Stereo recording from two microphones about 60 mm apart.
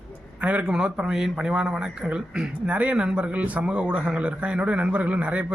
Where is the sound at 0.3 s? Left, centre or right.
Right.